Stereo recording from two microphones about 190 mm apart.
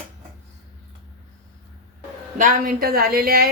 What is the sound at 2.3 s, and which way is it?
A woman's voice, 45° right (ahead or behind).